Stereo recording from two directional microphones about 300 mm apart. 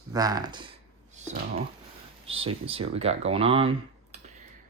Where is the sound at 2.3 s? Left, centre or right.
Centre.